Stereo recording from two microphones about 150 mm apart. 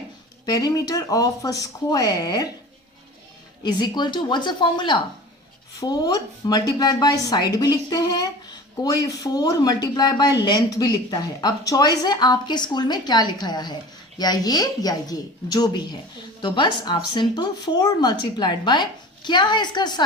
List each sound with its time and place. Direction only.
0.4 s speech: 25° left (ahead or behind)
3.6 s speech: 30° left (ahead or behind)